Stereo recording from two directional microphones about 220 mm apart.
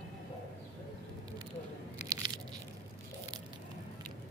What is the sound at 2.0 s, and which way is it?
Crunch, 20° right (ahead or behind).